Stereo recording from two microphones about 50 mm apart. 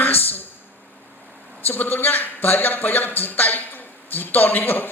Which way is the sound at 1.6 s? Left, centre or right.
Left.